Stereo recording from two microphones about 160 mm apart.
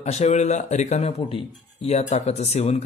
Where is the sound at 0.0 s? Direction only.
45° left (ahead or behind).